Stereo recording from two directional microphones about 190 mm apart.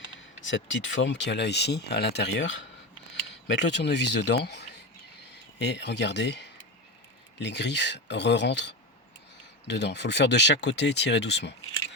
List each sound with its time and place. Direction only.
0.4 s speech: 75° left (ahead or behind)